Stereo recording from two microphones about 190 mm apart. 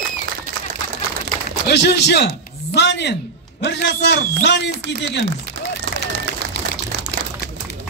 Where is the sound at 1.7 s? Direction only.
60° left (ahead or behind).